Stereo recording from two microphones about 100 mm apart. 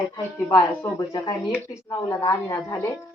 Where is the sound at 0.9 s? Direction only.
45° left (ahead or behind).